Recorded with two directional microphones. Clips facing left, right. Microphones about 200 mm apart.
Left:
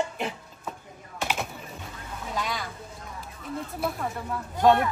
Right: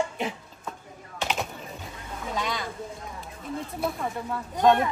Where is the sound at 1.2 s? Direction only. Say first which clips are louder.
Right 1 dB; 5° left (ahead or behind).